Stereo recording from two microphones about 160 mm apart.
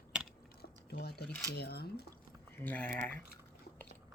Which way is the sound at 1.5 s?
85° left.